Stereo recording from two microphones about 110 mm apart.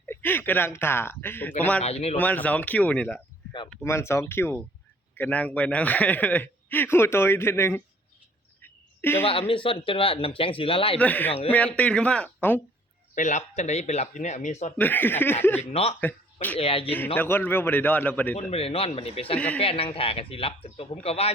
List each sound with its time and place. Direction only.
0.0 s speech: 20° left (ahead or behind)
1.8 s speech: 70° left (ahead or behind)
2.1 s a man's voice: 15° left (ahead or behind)
3.8 s a man's voice: 25° left (ahead or behind)
8.6 s a sound: 20° left (ahead or behind)
9.2 s speech: 55° left (ahead or behind)
11.0 s a man's voice: 15° left (ahead or behind)
13.2 s speech: 85° left
14.8 s speech: 15° left (ahead or behind)
15.7 s speech: 70° left (ahead or behind)
16.0 s speech: 15° left (ahead or behind)
16.6 s speech: 60° left (ahead or behind)
17.2 s a man's voice: 20° left (ahead or behind)
18.3 s speech: 65° left (ahead or behind)